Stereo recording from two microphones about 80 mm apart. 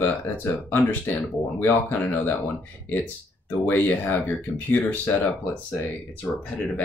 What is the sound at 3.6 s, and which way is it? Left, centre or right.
Speech, left.